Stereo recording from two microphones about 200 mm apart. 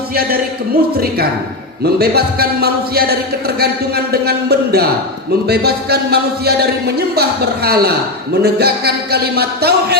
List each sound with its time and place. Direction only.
1.8 s speech: 50° right (ahead or behind)